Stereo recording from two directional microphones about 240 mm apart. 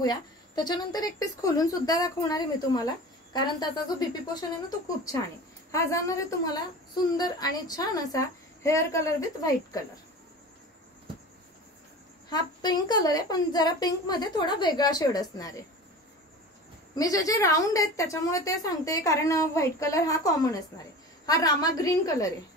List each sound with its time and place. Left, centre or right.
0.0 s a woman's voice: centre
12.3 s a woman's voice: centre
16.9 s a woman's voice: centre